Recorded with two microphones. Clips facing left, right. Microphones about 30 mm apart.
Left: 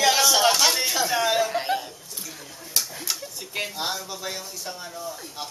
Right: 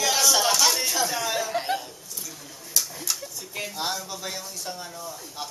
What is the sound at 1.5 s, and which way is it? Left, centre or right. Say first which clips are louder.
Chuckle: left 1 dB; centre.